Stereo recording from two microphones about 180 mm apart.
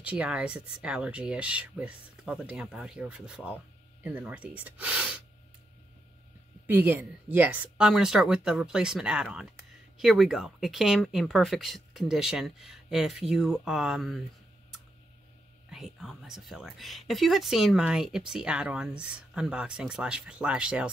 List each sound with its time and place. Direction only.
0.0 s speech: 5° right (ahead or behind)
6.7 s speech: 10° right (ahead or behind)
15.7 s speech: centre (ahead or behind)